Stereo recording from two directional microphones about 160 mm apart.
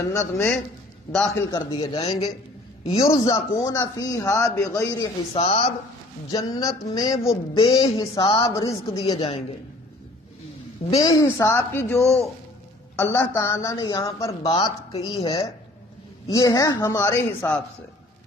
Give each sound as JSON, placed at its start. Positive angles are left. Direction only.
{"t": 0.1, "sound": "a woman's voice", "side_deg": 15}
{"t": 2.8, "sound": "a man's voice", "side_deg": 40}
{"t": 3.3, "sound": "a woman's voice", "side_deg": 20}
{"t": 5.3, "sound": "speech", "side_deg": 40}
{"t": 6.3, "sound": "a woman's voice", "side_deg": 25}
{"t": 9.1, "sound": "speech", "side_deg": 35}
{"t": 11.0, "sound": "a woman's voice", "side_deg": 20}
{"t": 14.4, "sound": "a woman's voice", "side_deg": 30}
{"t": 16.3, "sound": "a woman's voice", "side_deg": 20}
{"t": 17.3, "sound": "a woman's voice", "side_deg": 10}